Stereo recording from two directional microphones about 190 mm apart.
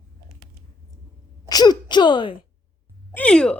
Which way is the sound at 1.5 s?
20° left (ahead or behind).